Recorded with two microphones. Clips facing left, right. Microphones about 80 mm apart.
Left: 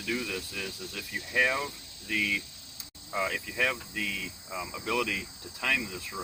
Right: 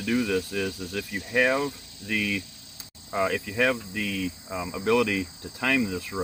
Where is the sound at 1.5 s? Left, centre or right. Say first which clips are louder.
Right 7 dB; right.